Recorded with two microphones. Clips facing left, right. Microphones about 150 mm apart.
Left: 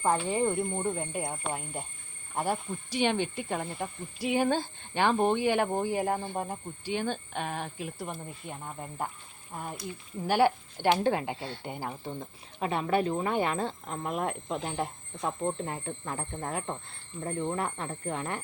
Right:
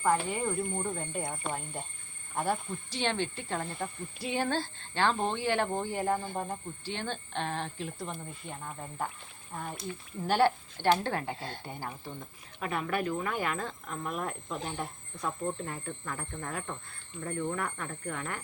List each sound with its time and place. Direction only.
0.0 s speech: 25° left (ahead or behind)
10.2 s speech: 10° left (ahead or behind)